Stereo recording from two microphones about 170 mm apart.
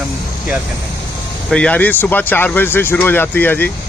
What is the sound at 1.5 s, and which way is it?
Speech, 5° left (ahead or behind).